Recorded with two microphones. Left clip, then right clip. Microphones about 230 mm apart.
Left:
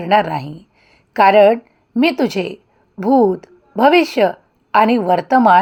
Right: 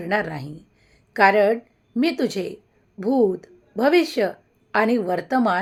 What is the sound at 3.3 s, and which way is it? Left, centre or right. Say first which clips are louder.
A woman's voice: left 6 dB; centre.